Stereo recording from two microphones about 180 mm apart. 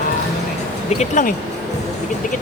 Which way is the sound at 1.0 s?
45° left (ahead or behind).